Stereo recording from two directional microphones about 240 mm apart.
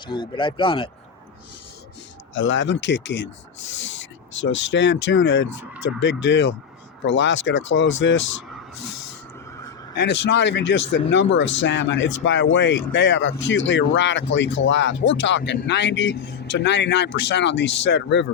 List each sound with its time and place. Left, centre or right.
0.1 s speech: centre
2.3 s speech: left
4.4 s speech: left
9.9 s speech: left